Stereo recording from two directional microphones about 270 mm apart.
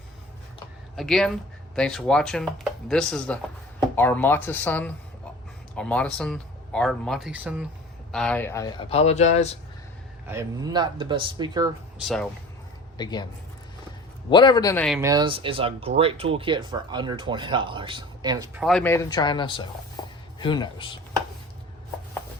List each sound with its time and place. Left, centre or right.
0.9 s speech: centre; by 9.6 s left
10.2 s speech: centre
11.9 s speech: centre
13.0 s speech: centre
14.3 s speech: centre
14.8 s speech: centre
15.1 s speech: centre
18.6 s speech: centre